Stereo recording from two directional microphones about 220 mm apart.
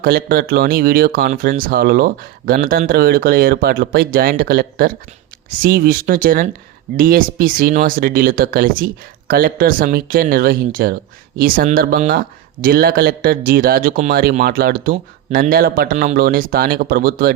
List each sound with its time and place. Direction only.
0.0 s speech: 40° right (ahead or behind)